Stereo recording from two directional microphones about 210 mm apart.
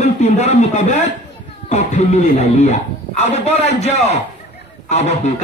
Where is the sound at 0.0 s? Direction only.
30° left (ahead or behind).